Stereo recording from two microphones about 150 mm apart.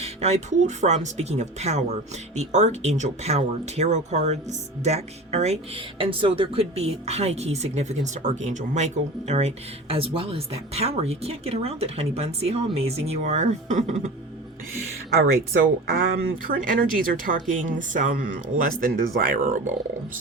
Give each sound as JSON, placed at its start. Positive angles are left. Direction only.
{"t": 0.0, "sound": "speech", "side_deg": -45}
{"t": 15.9, "sound": "speech", "side_deg": -70}